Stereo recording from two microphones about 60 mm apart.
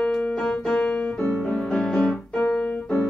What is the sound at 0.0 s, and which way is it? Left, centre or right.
Piano, centre.